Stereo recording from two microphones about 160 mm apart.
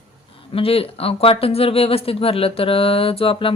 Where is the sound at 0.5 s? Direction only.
35° left (ahead or behind).